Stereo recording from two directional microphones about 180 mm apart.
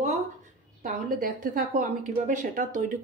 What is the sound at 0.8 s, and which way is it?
A woman's voice, 50° right (ahead or behind).